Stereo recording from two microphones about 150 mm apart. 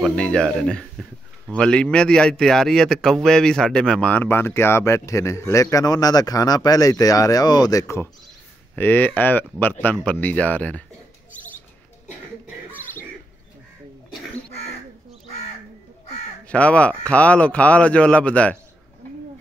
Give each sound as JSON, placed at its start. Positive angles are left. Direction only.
{"t": 0.1, "sound": "a man's voice", "side_deg": 5}
{"t": 16.4, "sound": "a man's voice", "side_deg": 10}